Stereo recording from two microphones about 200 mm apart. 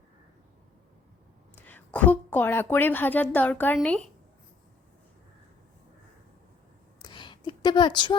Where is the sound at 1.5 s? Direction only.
10° left (ahead or behind).